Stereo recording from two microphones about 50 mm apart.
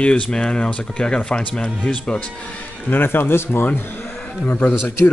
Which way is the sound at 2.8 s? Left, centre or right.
Left.